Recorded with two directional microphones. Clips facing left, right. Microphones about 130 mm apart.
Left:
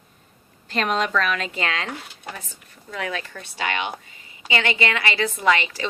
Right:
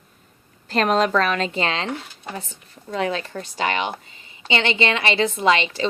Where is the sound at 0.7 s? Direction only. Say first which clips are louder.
Right 4 dB; 40° right (ahead or behind).